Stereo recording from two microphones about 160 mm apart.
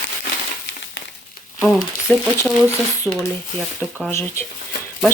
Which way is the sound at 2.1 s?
10° left (ahead or behind).